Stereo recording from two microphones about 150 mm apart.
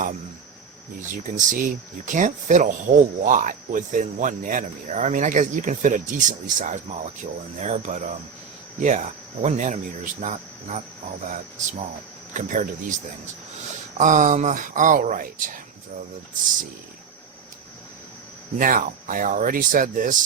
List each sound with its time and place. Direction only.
0.9 s speech: 60° right (ahead or behind)
14.0 s speech: 55° right (ahead or behind)
18.6 s speech: 65° right (ahead or behind)